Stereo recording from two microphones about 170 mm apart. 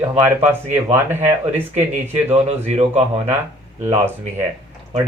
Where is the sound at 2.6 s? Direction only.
40° right (ahead or behind).